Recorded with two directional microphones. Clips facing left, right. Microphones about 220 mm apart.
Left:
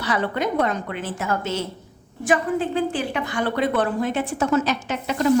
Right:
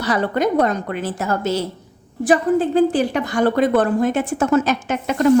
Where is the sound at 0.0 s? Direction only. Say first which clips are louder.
Right 5 dB; 40° right (ahead or behind).